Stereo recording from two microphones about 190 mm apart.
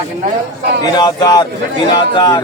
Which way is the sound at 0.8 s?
20° left (ahead or behind).